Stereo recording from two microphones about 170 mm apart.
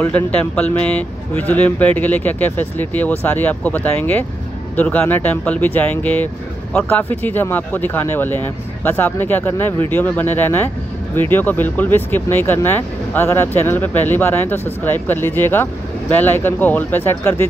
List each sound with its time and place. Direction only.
0.0 s speech: 10° left (ahead or behind)